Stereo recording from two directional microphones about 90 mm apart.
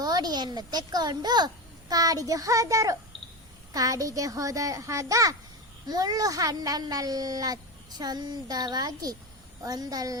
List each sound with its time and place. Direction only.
0.0 s a child's voice: 45° right (ahead or behind)